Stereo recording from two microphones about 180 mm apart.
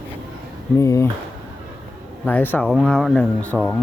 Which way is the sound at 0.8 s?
15° left (ahead or behind).